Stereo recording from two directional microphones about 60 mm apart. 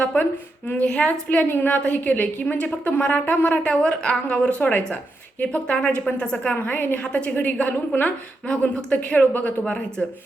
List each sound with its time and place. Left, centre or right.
0.0 s a sound: left
0.7 s a woman's voice: left
6.6 s a woman's voice: left
7.0 s a woman's voice: centre
9.3 s a woman's voice: left